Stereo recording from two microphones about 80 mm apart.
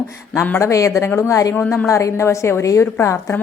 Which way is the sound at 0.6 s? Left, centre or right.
Left.